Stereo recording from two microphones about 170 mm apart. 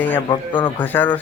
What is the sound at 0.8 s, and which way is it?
Speech, 10° left (ahead or behind).